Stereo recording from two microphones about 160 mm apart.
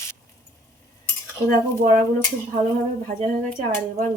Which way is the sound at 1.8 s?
50° right (ahead or behind).